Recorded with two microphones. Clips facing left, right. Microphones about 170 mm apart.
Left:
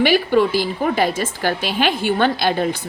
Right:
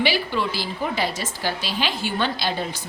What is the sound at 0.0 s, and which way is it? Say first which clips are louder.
A woman's voice: left 8 dB; 50° left (ahead or behind).